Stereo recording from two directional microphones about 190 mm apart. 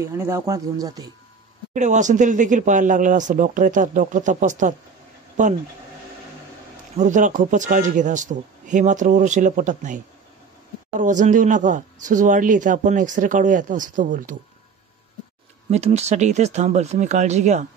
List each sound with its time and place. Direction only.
0.0 s speech: 15° right (ahead or behind)
1.7 s speech: 40° right (ahead or behind)
7.0 s speech: 40° right (ahead or behind)
11.0 s speech: 40° right (ahead or behind)
15.7 s speech: 35° right (ahead or behind)